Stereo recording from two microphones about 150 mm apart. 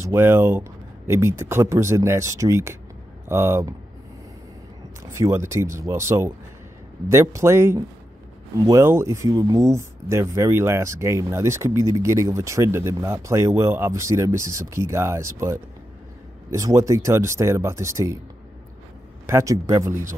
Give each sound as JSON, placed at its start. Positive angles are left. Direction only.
{"t": 0.0, "sound": "speech", "side_deg": -15}
{"t": 5.1, "sound": "speech", "side_deg": -20}
{"t": 19.2, "sound": "speech", "side_deg": -20}